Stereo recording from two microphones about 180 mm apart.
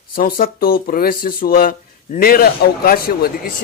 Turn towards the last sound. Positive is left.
turn(degrees=55)  # may be behind; listen again after turning